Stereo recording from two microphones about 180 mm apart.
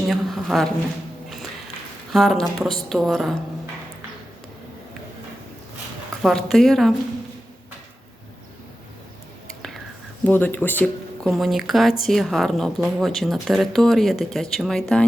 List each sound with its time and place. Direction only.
0.1 s a sound: centre (ahead or behind)
2.1 s speech: centre (ahead or behind)
6.2 s speech: centre (ahead or behind)
9.5 s whispering: centre (ahead or behind)
10.2 s speech: 10° left (ahead or behind)